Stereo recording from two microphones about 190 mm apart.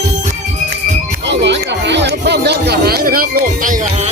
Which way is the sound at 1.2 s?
65° right (ahead or behind).